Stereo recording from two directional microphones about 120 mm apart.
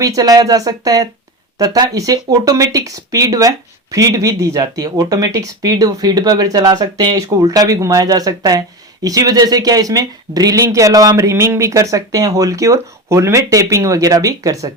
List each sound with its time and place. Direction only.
0.0 s speech: 30° right (ahead or behind)